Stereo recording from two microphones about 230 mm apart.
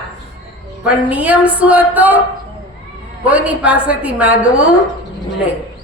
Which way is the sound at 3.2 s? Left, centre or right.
Centre.